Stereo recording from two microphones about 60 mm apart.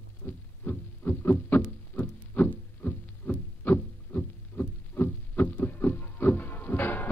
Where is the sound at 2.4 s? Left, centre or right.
Left.